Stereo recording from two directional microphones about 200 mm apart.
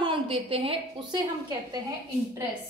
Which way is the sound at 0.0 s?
25° right (ahead or behind).